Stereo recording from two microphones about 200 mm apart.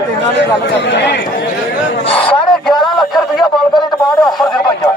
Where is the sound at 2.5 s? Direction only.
Centre (ahead or behind).